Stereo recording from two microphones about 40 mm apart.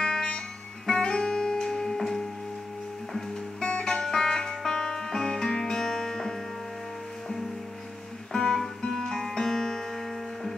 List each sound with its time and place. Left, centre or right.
0.0 s music: left
8.3 s music: centre